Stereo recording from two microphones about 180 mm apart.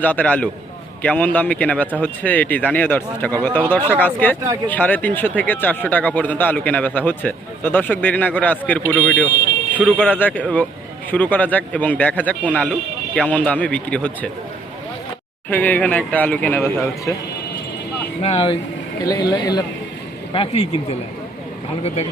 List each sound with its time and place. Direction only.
0.0 s speech: 10° left (ahead or behind)
15.4 s speech: 10° left (ahead or behind)
18.2 s speech: 35° left (ahead or behind)
19.0 s speech: 20° left (ahead or behind)
20.3 s speech: 30° left (ahead or behind)